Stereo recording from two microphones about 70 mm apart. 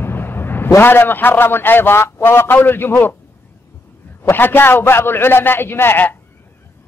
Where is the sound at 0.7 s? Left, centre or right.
Left.